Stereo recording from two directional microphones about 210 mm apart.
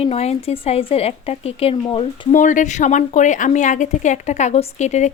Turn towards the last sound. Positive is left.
turn(degrees=35)  # may be behind; listen again after turning